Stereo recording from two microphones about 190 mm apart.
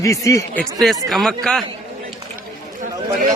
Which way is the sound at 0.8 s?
Centre (ahead or behind).